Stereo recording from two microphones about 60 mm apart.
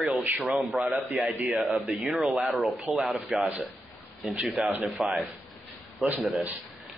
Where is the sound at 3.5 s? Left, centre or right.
Right.